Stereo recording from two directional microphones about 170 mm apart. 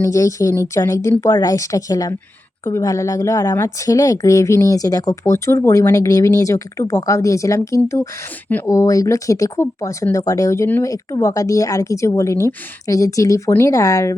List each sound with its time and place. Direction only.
0.0 s a woman's voice: 20° left (ahead or behind)